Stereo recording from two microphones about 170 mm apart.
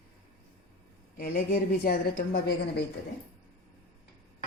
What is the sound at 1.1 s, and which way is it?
A woman's voice, 55° left (ahead or behind).